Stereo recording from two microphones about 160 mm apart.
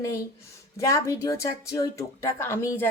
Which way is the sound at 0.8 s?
20° left (ahead or behind).